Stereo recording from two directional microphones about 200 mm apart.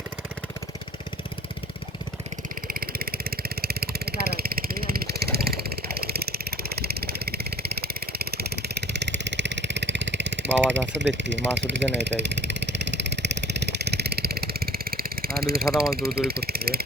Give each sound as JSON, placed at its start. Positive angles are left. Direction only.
{"t": 2.6, "sound": "vehicle", "side_deg": -45}
{"t": 16.0, "sound": "speech", "side_deg": -50}